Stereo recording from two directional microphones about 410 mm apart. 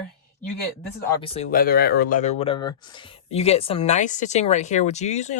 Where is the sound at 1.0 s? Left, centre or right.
Centre.